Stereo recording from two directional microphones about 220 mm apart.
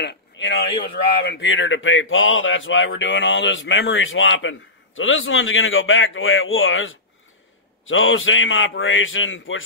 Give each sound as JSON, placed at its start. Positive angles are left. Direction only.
{"t": 0.0, "sound": "speech", "side_deg": 50}